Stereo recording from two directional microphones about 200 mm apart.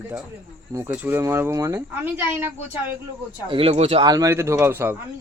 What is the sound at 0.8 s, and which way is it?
Speech, 10° right (ahead or behind).